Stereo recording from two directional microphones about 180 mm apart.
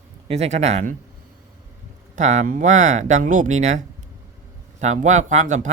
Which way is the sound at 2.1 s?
40° right (ahead or behind).